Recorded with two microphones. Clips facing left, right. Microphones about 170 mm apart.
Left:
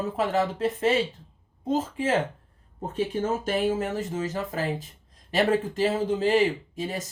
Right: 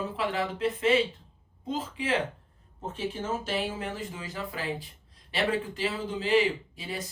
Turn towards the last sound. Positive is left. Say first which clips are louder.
# left 5 dB
turn(degrees=45)  # may be behind; listen again after turning